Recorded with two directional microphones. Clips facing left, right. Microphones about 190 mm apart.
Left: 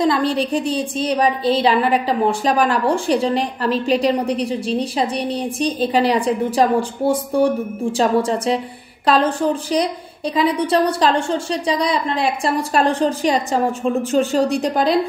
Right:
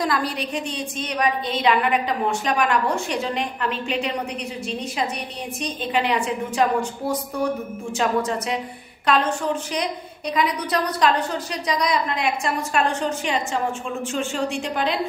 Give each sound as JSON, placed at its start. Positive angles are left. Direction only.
{"t": 0.0, "sound": "a woman's voice", "side_deg": 25}